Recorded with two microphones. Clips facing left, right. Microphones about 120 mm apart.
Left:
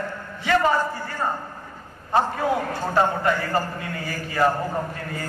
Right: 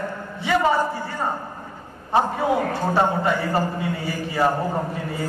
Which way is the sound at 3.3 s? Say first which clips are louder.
Right 1 dB; 5° right (ahead or behind).